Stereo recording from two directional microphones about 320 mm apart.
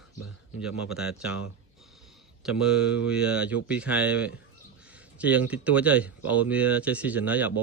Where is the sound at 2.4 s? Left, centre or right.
Centre.